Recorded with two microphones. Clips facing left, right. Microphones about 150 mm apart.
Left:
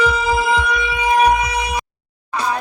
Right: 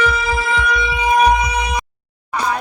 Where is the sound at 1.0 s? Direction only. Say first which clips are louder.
Even; 5° left (ahead or behind).